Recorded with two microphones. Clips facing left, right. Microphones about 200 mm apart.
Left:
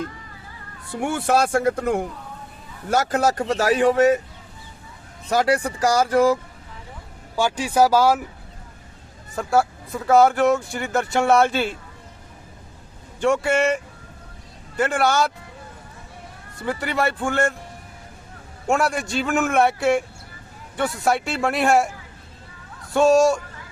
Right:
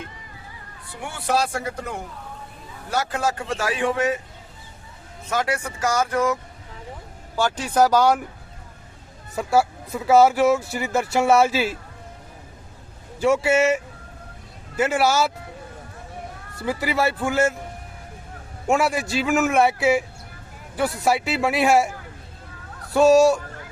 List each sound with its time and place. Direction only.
1.0 s speech: 50° left (ahead or behind)
2.9 s speech: 45° left (ahead or behind)
5.3 s speech: 35° left (ahead or behind)
7.3 s speech: 10° left (ahead or behind)
9.3 s speech: centre (ahead or behind)
13.1 s speech: 5° right (ahead or behind)
16.6 s speech: centre (ahead or behind)
18.7 s speech: centre (ahead or behind)
22.9 s speech: centre (ahead or behind)